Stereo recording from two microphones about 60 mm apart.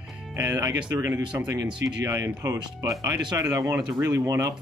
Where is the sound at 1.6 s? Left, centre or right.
Right.